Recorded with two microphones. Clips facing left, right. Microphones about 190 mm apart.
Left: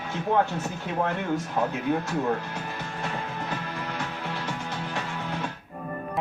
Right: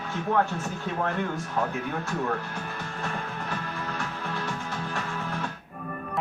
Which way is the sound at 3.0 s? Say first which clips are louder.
Left 1 dB; 20° left (ahead or behind).